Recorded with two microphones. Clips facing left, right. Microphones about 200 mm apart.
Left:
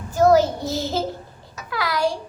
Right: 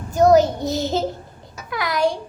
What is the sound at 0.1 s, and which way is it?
Child singing, 20° right (ahead or behind).